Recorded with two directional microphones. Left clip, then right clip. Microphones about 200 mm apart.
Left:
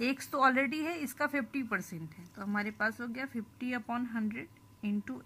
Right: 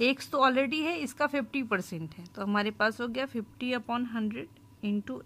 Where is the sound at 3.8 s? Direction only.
15° right (ahead or behind).